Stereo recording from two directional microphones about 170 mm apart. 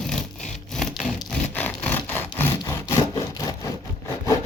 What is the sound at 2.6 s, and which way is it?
Wood, 15° left (ahead or behind).